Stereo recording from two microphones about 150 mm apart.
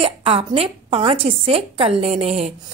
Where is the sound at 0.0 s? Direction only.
40° right (ahead or behind).